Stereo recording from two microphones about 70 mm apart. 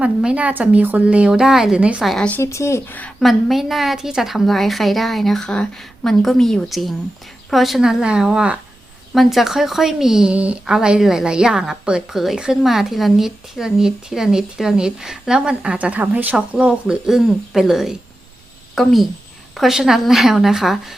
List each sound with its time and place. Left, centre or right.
0.0 s a woman's voice: centre
2.4 s speech: left
3.2 s a woman's voice: centre
10.3 s a woman's voice: centre